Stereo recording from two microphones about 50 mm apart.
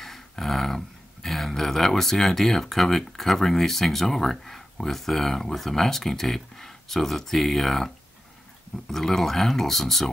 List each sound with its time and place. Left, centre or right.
0.0 s speech: centre